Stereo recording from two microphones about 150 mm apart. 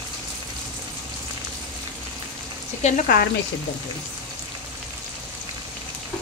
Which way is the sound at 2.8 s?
55° left (ahead or behind).